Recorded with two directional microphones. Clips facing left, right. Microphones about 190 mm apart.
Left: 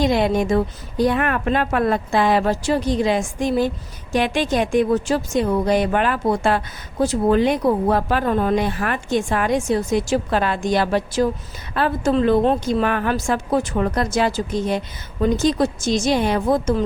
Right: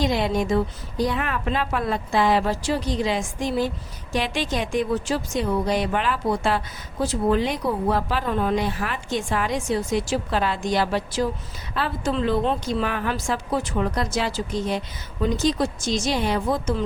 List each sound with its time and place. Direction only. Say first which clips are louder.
0.0 s speech: left 4 dB; 55° left (ahead or behind)